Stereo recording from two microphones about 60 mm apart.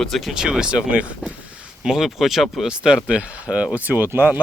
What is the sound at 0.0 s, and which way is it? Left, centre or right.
Speech, centre.